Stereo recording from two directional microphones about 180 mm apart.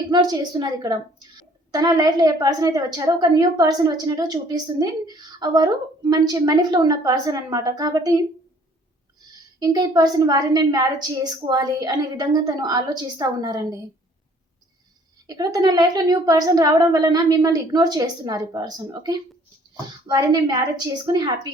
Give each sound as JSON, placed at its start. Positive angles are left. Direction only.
{"t": 0.1, "sound": "a woman's voice", "side_deg": -25}
{"t": 9.6, "sound": "a woman's voice", "side_deg": -20}
{"t": 15.3, "sound": "a woman's voice", "side_deg": -20}